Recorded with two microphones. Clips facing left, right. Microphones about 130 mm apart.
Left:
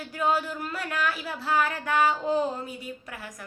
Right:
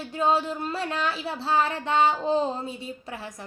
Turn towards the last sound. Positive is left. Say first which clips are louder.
# right 3 dB
turn(degrees=-25)  # may be behind; listen again after turning